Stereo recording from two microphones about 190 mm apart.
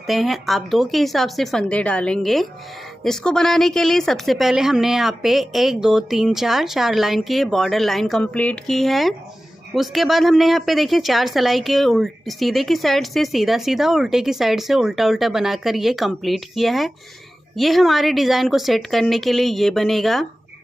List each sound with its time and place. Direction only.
0.0 s a woman's voice: centre (ahead or behind)